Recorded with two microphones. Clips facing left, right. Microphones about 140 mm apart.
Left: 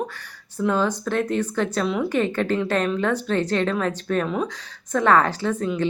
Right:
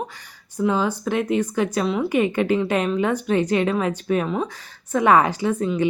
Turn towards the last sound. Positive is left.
turn(degrees=-10)  # may be behind; listen again after turning